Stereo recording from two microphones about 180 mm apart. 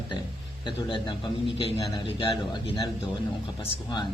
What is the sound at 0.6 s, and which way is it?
A man's voice, 25° left (ahead or behind).